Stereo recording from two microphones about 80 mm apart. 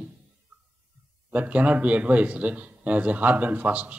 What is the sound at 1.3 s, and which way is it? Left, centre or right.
Speech, centre.